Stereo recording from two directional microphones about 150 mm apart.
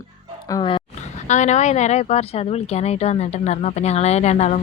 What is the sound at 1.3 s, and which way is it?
Speech, 50° left (ahead or behind).